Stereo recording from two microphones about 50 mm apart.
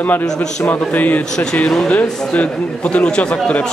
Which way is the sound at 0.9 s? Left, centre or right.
Left.